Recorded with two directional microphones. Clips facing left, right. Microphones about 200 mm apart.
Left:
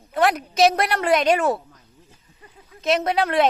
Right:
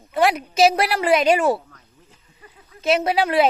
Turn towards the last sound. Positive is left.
turn(degrees=0)  # may be behind; listen again after turning